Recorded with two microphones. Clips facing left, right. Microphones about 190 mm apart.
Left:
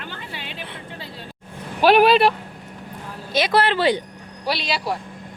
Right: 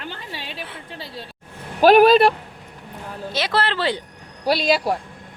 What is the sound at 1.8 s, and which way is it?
Speech, 45° right (ahead or behind).